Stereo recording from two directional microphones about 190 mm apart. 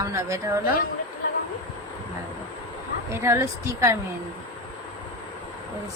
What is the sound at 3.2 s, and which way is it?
Speech, 15° right (ahead or behind).